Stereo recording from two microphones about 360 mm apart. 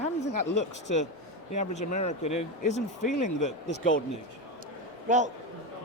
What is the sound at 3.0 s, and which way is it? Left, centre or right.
Speech, left.